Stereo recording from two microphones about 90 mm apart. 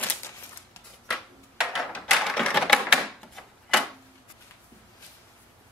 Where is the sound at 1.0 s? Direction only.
Centre (ahead or behind).